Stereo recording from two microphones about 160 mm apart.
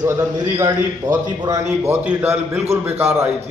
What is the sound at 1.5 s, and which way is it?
A man's voice, 20° right (ahead or behind).